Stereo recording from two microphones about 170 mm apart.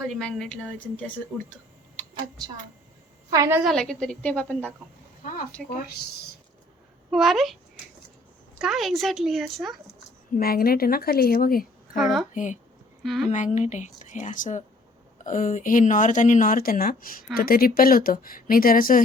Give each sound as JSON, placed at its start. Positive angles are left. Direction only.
{"t": 0.1, "sound": "speech", "side_deg": 5}
{"t": 3.2, "sound": "a woman's voice", "side_deg": -20}
{"t": 3.6, "sound": "speech", "side_deg": 0}
{"t": 5.2, "sound": "speech", "side_deg": 55}
{"t": 7.1, "sound": "speech", "side_deg": 0}
{"t": 10.3, "sound": "speech", "side_deg": 60}
{"t": 11.9, "sound": "speech", "side_deg": 0}
{"t": 12.3, "sound": "speech", "side_deg": 45}
{"t": 13.0, "sound": "speech", "side_deg": 0}
{"t": 13.3, "sound": "speech", "side_deg": 45}